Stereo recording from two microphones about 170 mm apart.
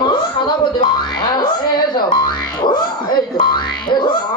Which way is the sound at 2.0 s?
25° left (ahead or behind).